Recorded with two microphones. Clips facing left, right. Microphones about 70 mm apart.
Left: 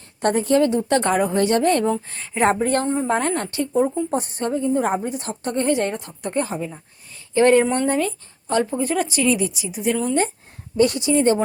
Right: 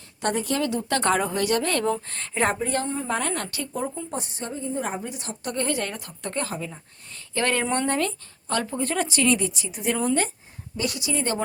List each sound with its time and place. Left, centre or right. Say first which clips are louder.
0.2 s speech: left 8 dB; left
1.0 s speech: left 3 dB; centre
1.3 s a woman's voice: left 6 dB; left
1.9 s speech: left 3 dB; centre
2.6 s speech: left 6 dB; left
4.1 s a woman's voice: left 9 dB; left
4.9 s speech: left 8 dB; left
5.5 s a woman's voice: left 7 dB; left
7.7 s speech: left 4 dB; centre
8.4 s a woman's voice: left 6 dB; left
8.8 s a woman's voice: left 3 dB; centre
10.8 s speech: left 10 dB; left